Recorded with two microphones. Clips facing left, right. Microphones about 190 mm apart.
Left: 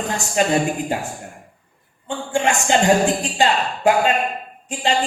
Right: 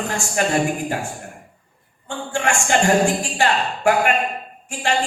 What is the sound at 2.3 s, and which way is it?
A man's voice, 20° left (ahead or behind).